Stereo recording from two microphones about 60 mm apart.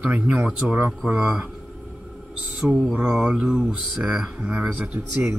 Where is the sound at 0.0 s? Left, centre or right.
Right.